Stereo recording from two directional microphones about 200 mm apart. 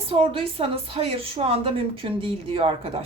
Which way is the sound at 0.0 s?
25° right (ahead or behind).